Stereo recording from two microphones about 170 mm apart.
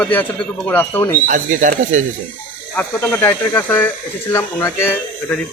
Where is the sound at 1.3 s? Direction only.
50° right (ahead or behind).